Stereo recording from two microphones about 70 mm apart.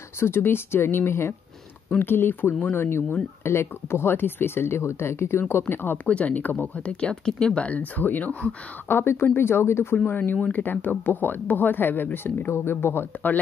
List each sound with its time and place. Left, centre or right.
0.2 s speech: left
6.0 s speech: centre
8.8 s speech: left